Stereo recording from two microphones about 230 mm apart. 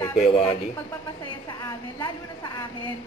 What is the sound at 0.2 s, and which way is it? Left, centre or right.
Speech, left.